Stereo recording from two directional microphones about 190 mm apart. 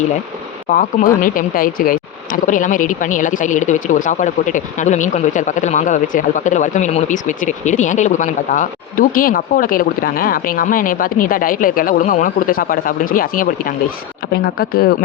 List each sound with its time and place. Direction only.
0.7 s speech: 45° left (ahead or behind)